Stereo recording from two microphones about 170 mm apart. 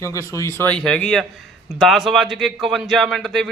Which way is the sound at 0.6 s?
5° left (ahead or behind).